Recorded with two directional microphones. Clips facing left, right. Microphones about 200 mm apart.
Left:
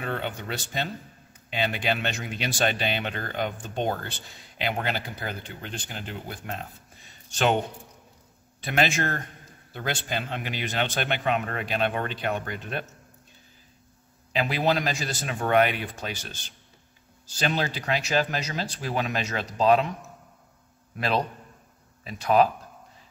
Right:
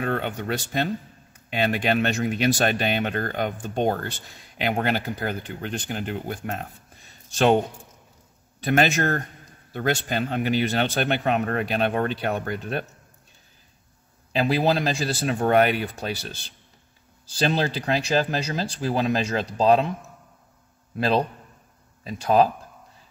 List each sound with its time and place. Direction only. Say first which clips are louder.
0.0 s speech: right 5 dB; 50° right (ahead or behind)
8.6 s speech: right 5 dB; 45° right (ahead or behind)
14.3 s speech: right 3 dB; 35° right (ahead or behind)
17.4 s speech: right 4 dB; 30° right (ahead or behind)
22.0 s speech: right 2 dB; 35° right (ahead or behind)